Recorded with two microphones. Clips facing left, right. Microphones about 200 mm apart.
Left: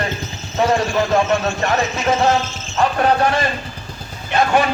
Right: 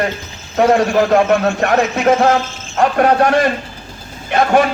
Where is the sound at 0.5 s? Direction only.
60° right (ahead or behind).